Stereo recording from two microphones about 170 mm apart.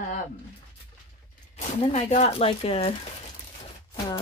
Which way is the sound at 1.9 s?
40° left (ahead or behind).